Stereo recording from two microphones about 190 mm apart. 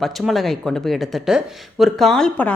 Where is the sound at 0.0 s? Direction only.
Centre (ahead or behind).